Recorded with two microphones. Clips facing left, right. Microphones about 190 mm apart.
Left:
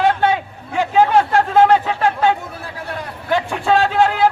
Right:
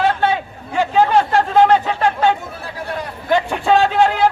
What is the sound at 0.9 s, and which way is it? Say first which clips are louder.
Chatter: left 1 dB; 10° left (ahead or behind).